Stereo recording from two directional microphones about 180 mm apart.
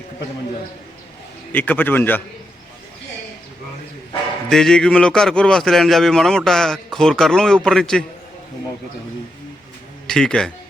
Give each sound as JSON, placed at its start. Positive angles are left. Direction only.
{"t": 1.5, "sound": "a man's voice", "side_deg": 10}
{"t": 4.4, "sound": "speech", "side_deg": 5}
{"t": 10.1, "sound": "speech", "side_deg": 5}